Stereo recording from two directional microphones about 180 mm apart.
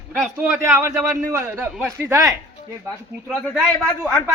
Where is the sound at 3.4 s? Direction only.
10° left (ahead or behind).